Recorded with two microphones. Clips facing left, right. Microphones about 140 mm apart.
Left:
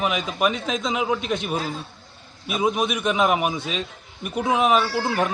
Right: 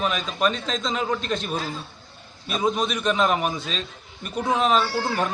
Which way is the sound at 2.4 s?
5° left (ahead or behind).